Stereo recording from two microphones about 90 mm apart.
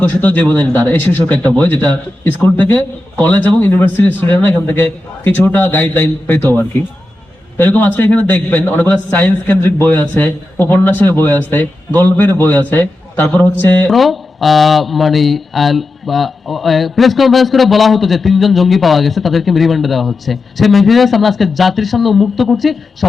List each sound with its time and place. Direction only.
0.1 s a man's voice: 15° left (ahead or behind)
7.5 s a man's voice: 20° left (ahead or behind)
13.9 s speech: centre (ahead or behind)